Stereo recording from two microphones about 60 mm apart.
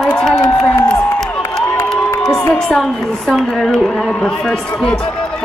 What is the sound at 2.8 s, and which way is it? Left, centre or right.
A woman's voice, centre.